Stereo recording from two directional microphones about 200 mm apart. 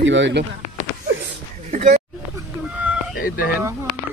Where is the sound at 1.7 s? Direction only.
35° right (ahead or behind).